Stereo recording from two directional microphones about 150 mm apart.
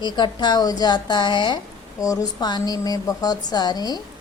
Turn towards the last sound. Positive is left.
turn(degrees=25)  # may be behind; listen again after turning